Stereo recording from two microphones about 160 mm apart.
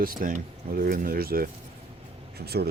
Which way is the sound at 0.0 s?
60° right (ahead or behind).